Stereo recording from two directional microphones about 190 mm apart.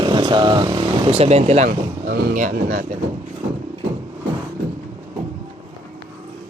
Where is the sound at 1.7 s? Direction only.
50° right (ahead or behind).